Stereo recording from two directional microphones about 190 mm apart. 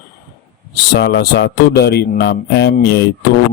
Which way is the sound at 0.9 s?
60° left (ahead or behind).